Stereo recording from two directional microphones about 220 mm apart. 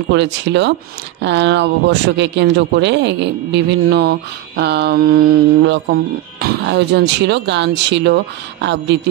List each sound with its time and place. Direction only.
0.1 s a man's voice: 55° right (ahead or behind)